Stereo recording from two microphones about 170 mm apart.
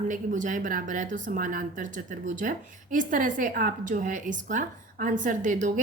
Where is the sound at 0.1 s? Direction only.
50° right (ahead or behind).